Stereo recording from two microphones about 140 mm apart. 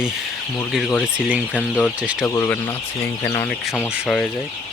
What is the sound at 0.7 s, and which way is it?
Speech, centre (ahead or behind).